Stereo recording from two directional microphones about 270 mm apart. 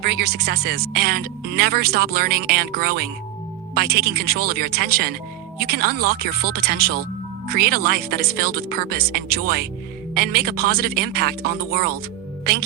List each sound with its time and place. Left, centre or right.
0.0 s speech: right